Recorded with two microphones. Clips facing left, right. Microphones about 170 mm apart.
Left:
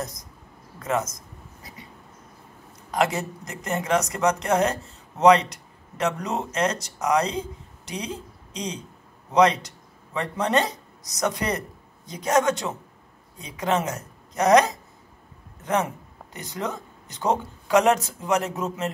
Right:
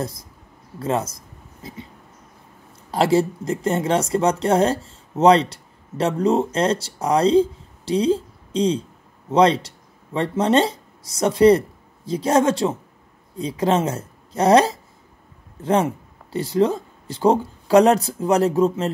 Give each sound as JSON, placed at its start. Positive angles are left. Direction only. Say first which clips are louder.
{"t": 0.7, "sound": "speech", "louder": "right 3 dB", "side_deg": -30}
{"t": 2.9, "sound": "speech", "louder": "right 7 dB", "side_deg": -30}